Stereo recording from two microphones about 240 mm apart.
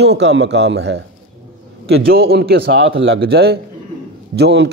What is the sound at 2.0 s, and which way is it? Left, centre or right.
A man's voice, right.